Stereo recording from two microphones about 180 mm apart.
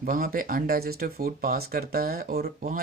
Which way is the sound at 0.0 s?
55° right (ahead or behind).